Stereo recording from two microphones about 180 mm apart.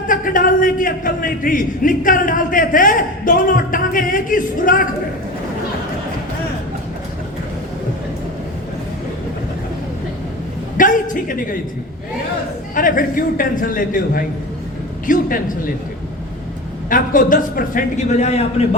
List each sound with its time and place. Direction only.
0.1 s a man's voice: 50° left (ahead or behind)
10.8 s a sound: 50° left (ahead or behind)
12.7 s a man's voice: 50° left (ahead or behind)
16.9 s a man's voice: 50° left (ahead or behind)